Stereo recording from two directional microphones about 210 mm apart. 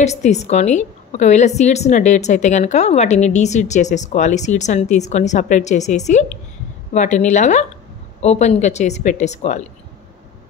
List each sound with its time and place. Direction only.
0.0 s a woman's voice: 35° left (ahead or behind)